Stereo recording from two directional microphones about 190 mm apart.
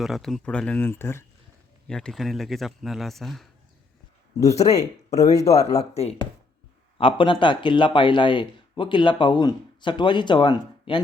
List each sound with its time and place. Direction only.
0.0 s a man's voice: centre (ahead or behind)
4.4 s speech: 35° left (ahead or behind)